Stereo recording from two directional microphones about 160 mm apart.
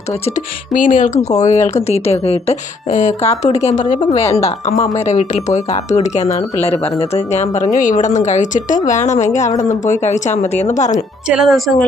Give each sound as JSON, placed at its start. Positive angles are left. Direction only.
{"t": 0.3, "sound": "a woman's voice", "side_deg": 50}
{"t": 11.3, "sound": "speech", "side_deg": 0}